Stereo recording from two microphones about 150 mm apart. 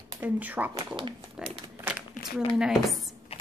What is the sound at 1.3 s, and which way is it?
Crumpling, 5° right (ahead or behind).